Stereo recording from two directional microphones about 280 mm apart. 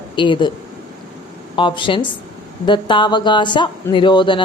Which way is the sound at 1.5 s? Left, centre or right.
Centre.